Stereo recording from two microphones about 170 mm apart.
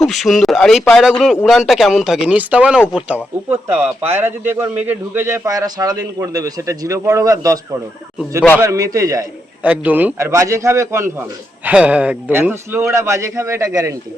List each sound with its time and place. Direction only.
0.0 s a man's voice: centre (ahead or behind); by 13.9 s 15° right (ahead or behind)